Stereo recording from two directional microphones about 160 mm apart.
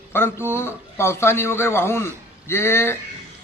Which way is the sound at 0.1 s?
15° left (ahead or behind).